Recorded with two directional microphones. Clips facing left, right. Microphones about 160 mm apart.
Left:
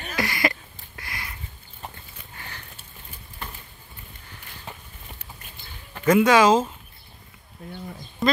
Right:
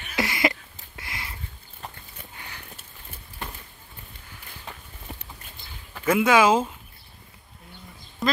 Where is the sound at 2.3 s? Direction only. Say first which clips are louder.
Left 2 dB; 10° right (ahead or behind).